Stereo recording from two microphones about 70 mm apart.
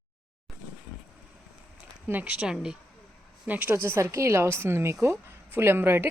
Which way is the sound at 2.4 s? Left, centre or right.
Centre.